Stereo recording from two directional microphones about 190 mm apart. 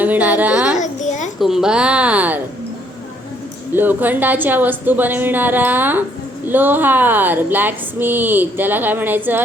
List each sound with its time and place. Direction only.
0.0 s a woman's voice: 10° right (ahead or behind)
0.8 s a sound: 40° left (ahead or behind)
1.4 s a woman's voice: centre (ahead or behind)
3.8 s a woman's voice: 10° right (ahead or behind)